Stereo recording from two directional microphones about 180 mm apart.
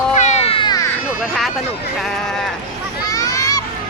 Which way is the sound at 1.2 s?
Centre (ahead or behind).